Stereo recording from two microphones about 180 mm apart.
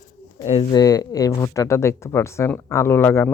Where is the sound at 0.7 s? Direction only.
20° left (ahead or behind).